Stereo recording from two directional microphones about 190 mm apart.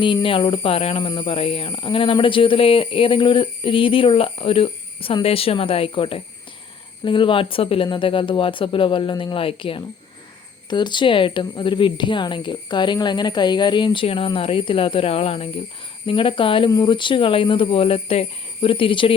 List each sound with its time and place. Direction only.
0.0 s speech: 25° left (ahead or behind)